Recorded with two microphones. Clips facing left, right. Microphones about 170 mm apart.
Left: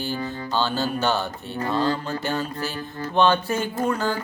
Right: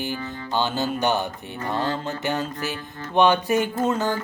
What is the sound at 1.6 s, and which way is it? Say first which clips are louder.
Music: left 2 dB; 20° right (ahead or behind).